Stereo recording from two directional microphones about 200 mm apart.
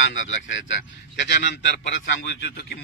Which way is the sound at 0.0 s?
70° left (ahead or behind).